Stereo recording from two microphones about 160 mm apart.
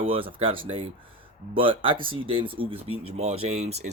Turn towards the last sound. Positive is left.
turn(degrees=-40)  # may be behind; listen again after turning